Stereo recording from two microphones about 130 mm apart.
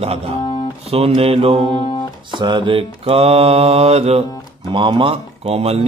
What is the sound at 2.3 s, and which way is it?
Music, 35° right (ahead or behind).